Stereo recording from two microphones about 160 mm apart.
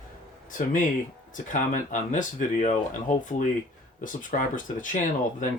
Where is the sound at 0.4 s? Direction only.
55° left (ahead or behind).